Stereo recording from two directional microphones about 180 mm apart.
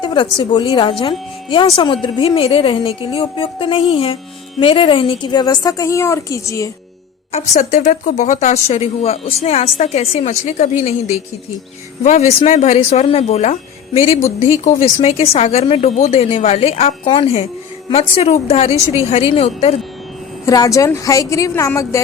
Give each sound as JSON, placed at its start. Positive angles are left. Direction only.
{"t": 0.0, "sound": "a sound", "side_deg": 25}
{"t": 0.5, "sound": "speech", "side_deg": 25}
{"t": 7.3, "sound": "speech", "side_deg": 40}
{"t": 14.6, "sound": "speech", "side_deg": 35}
{"t": 20.4, "sound": "a woman's voice", "side_deg": 20}